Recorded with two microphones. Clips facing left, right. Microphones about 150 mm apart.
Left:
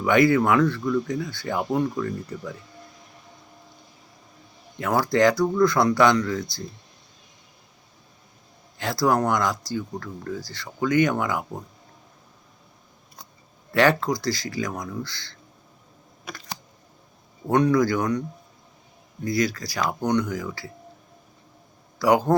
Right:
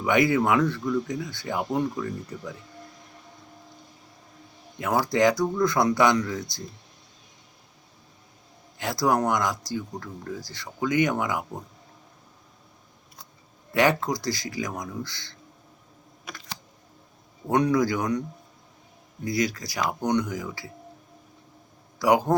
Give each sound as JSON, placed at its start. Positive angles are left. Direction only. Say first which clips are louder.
{"t": 0.0, "sound": "speech", "louder": "left 3 dB", "side_deg": -20}
{"t": 4.8, "sound": "speech", "louder": "left 2 dB", "side_deg": -15}
{"t": 8.8, "sound": "speech", "louder": "left 2 dB", "side_deg": -20}
{"t": 13.7, "sound": "speech", "louder": "left 2 dB", "side_deg": -15}
{"t": 16.2, "sound": "camera", "louder": "left 3 dB", "side_deg": 35}
{"t": 17.5, "sound": "speech", "louder": "left 3 dB", "side_deg": -20}
{"t": 19.2, "sound": "speech", "louder": "left 2 dB", "side_deg": -20}
{"t": 21.9, "sound": "a man's voice", "louder": "left 2 dB", "side_deg": -20}